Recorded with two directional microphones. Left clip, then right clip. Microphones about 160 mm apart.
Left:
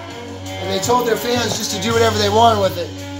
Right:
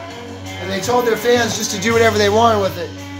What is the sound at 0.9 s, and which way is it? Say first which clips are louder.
Speech: even; 15° right (ahead or behind).